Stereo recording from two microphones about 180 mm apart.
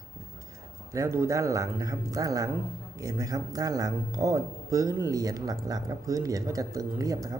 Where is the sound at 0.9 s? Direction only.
15° right (ahead or behind).